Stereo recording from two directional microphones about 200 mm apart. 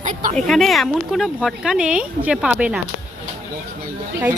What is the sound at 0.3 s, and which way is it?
Speech, centre (ahead or behind).